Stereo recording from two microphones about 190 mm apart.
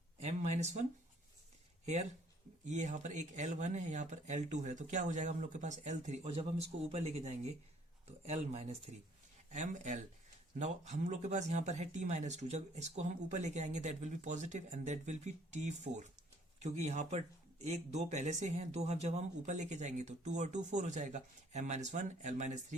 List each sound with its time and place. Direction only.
0.2 s speech: 35° right (ahead or behind)